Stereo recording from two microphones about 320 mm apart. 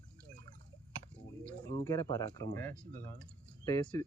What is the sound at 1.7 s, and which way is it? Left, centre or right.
Speech, centre.